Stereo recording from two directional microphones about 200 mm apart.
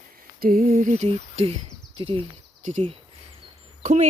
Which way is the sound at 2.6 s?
40° right (ahead or behind).